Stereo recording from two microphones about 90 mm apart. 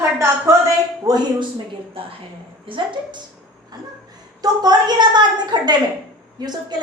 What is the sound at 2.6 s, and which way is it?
Speech, 65° right (ahead or behind).